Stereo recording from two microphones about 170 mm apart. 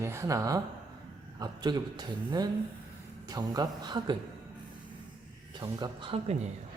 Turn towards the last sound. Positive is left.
turn(degrees=-35)  # may be behind; listen again after turning